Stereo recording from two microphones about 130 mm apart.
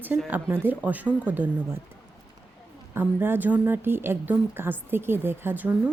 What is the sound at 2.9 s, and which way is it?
Speech, 15° right (ahead or behind).